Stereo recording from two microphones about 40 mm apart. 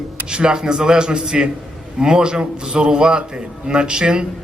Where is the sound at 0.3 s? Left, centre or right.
Right.